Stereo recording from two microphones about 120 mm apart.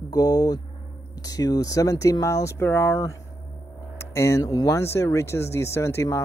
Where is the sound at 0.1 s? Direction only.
30° left (ahead or behind).